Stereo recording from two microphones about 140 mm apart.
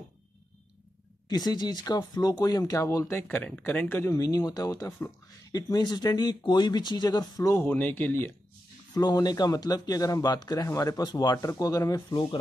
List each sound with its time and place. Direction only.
1.3 s speech: 30° left (ahead or behind)
8.9 s speech: 30° left (ahead or behind)